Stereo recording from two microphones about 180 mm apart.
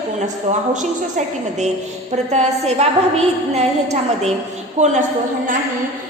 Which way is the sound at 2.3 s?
35° right (ahead or behind).